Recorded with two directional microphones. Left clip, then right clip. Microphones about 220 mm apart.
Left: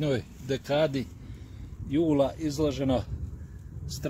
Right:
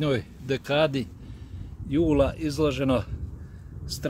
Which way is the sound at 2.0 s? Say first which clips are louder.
Right 3 dB; 25° right (ahead or behind).